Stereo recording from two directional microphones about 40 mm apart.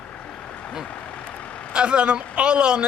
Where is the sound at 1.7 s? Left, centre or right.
Right.